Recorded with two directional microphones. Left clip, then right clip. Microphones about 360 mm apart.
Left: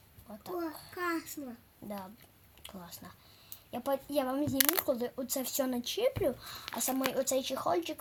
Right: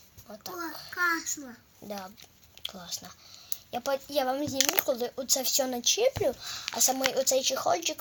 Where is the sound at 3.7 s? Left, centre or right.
Right.